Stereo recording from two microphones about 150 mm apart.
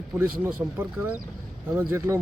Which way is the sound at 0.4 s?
15° right (ahead or behind).